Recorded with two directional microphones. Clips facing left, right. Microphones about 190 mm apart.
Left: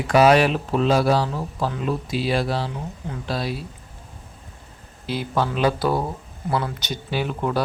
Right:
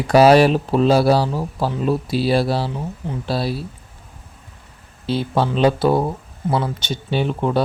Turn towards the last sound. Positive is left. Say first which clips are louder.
# right 4 dB
turn(degrees=-25)  # may be behind; listen again after turning